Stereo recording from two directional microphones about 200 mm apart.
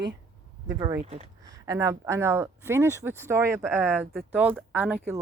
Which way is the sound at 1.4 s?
15° right (ahead or behind).